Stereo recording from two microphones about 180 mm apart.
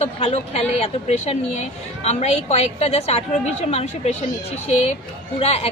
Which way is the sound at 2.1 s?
35° left (ahead or behind).